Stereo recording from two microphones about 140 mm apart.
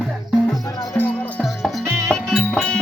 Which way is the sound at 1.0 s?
10° left (ahead or behind).